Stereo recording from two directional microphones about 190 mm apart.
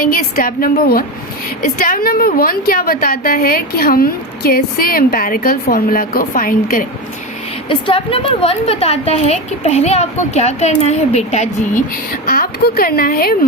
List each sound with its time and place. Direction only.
0.0 s a woman's voice: 50° left (ahead or behind)
7.7 s a woman's voice: 25° left (ahead or behind)
12.2 s a woman's voice: 50° left (ahead or behind)